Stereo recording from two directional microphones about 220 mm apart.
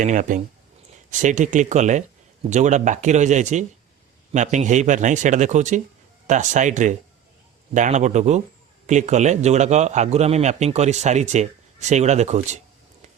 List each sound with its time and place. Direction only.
0.0 s a man's voice: 35° right (ahead or behind)